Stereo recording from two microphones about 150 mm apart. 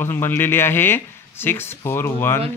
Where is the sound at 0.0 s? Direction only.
15° left (ahead or behind).